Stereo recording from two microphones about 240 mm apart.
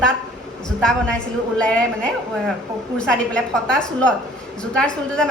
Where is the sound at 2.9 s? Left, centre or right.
Centre.